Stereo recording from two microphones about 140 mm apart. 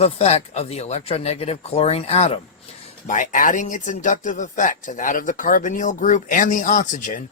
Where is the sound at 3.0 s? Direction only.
65° left (ahead or behind).